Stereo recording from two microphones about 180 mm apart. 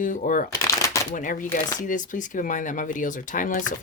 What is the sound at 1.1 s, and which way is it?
Speech, 45° left (ahead or behind).